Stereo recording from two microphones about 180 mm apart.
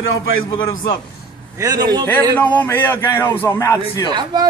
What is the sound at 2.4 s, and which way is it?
A man's voice, 10° left (ahead or behind).